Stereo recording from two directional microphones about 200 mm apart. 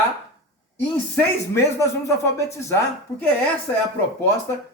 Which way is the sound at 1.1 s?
15° left (ahead or behind).